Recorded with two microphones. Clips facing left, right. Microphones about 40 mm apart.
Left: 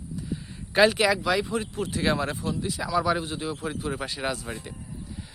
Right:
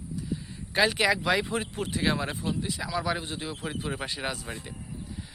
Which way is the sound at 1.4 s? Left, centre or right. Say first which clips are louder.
Left 2 dB; right.